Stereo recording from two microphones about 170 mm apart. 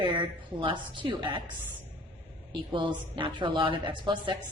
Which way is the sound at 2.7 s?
30° right (ahead or behind).